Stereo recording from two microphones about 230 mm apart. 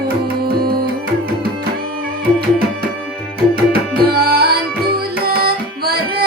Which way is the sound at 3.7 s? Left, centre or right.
Right.